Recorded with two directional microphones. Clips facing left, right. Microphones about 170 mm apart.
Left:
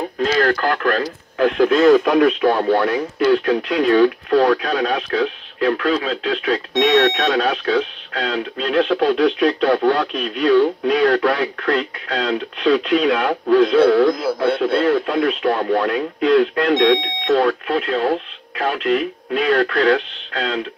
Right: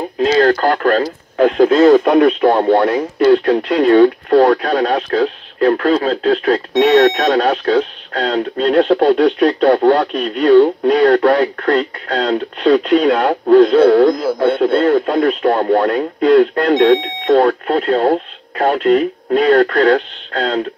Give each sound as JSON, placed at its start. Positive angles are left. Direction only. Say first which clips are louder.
{"t": 0.2, "sound": "speech", "louder": "right 6 dB", "side_deg": -30}
{"t": 14.6, "sound": "speech", "louder": "right 4 dB", "side_deg": -45}